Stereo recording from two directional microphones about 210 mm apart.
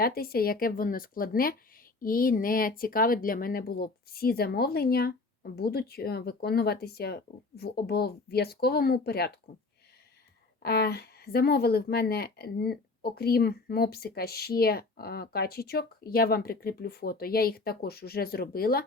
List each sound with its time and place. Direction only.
0.0 s a woman's voice: 45° left (ahead or behind)
10.6 s a woman's voice: 50° left (ahead or behind)